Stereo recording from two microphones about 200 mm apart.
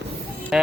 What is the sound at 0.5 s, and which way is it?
Speech, centre (ahead or behind).